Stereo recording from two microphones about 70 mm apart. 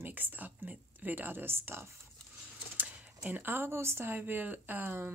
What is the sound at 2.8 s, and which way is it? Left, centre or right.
Speech, right.